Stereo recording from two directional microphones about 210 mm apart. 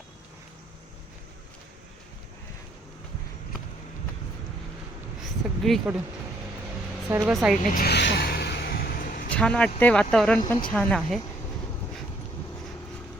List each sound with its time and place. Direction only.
5.2 s speech: centre (ahead or behind)
7.2 s speech: centre (ahead or behind)
7.7 s vehicle: 45° left (ahead or behind)
9.3 s speech: 5° left (ahead or behind)